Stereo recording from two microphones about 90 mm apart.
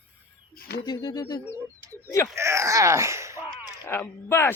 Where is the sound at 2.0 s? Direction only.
35° left (ahead or behind).